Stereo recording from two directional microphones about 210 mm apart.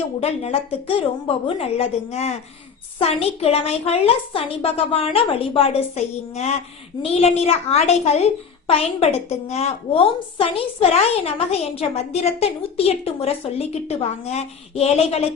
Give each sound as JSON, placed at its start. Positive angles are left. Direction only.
{"t": 0.2, "sound": "a woman's voice", "side_deg": 30}